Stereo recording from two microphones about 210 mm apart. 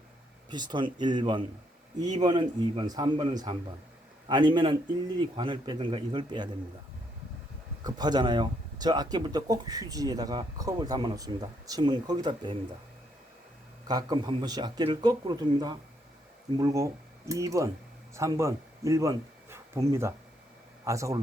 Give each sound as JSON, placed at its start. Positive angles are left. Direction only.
{"t": 0.5, "sound": "speech", "side_deg": -20}
{"t": 7.9, "sound": "speech", "side_deg": -20}
{"t": 13.8, "sound": "speech", "side_deg": -20}